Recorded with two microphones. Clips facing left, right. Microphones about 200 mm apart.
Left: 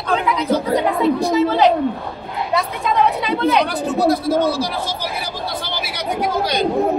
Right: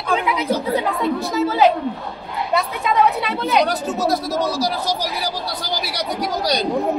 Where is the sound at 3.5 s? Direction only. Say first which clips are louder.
Left 1 dB; 40° right (ahead or behind).